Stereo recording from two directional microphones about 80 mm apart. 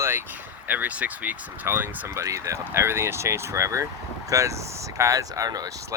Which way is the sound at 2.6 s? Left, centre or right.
Right.